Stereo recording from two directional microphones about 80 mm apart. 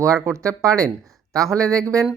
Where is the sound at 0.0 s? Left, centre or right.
Right.